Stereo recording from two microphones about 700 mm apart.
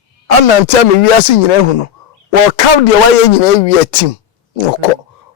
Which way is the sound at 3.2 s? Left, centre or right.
Left.